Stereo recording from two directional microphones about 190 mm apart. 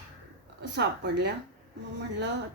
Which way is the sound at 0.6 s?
60° right (ahead or behind).